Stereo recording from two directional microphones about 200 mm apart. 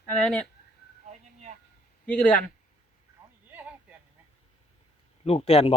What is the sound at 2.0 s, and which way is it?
Speech, 5° left (ahead or behind).